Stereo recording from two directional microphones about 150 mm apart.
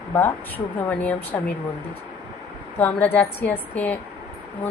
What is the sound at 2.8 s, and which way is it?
Speech, 10° left (ahead or behind).